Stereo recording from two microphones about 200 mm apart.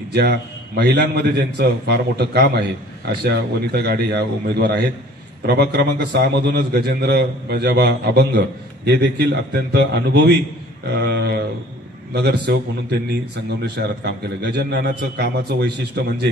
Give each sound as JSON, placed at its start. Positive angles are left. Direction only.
{"t": 0.1, "sound": "a man's voice", "side_deg": -55}
{"t": 13.6, "sound": "a man's voice", "side_deg": -55}